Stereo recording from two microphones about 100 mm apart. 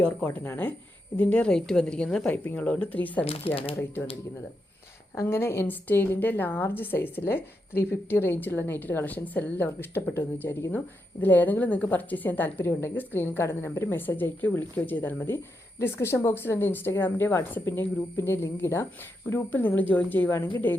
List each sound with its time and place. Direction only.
0.3 s a woman's voice: 20° left (ahead or behind)
3.2 s speech: 75° left (ahead or behind)
5.1 s a woman's voice: 25° left (ahead or behind)